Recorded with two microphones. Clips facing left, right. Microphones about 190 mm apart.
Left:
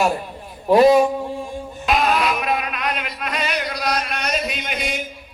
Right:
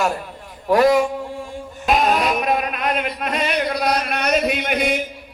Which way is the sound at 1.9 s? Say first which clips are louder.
Right 1 dB; 45° right (ahead or behind).